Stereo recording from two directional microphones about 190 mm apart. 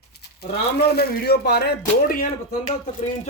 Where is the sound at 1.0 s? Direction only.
55° left (ahead or behind).